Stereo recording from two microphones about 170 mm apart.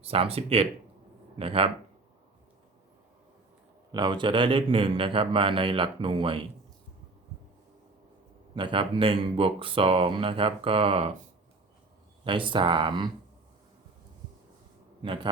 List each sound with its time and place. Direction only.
0.0 s speech: 35° right (ahead or behind)
3.9 s speech: 25° right (ahead or behind)
8.5 s speech: 30° right (ahead or behind)
12.2 s speech: 30° right (ahead or behind)
15.0 s speech: 30° right (ahead or behind)